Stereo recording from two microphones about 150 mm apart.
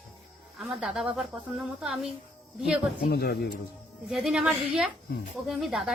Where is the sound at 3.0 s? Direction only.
90° left.